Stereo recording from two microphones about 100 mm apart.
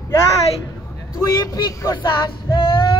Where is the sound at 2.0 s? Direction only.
50° left (ahead or behind).